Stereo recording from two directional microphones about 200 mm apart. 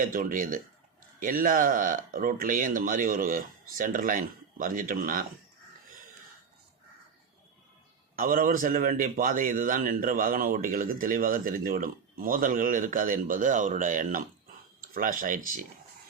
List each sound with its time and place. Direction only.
0.0 s a man's voice: 45° right (ahead or behind)
8.1 s a man's voice: 45° right (ahead or behind)